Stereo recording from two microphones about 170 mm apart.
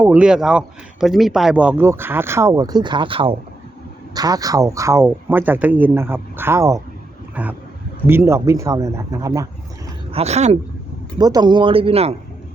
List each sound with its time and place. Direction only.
0.0 s speech: 10° right (ahead or behind)
7.4 s speech: 10° right (ahead or behind)
10.1 s speech: 35° right (ahead or behind)
11.2 s speech: 25° right (ahead or behind)